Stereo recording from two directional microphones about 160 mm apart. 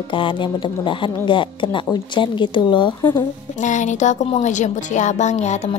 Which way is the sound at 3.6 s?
50° left (ahead or behind).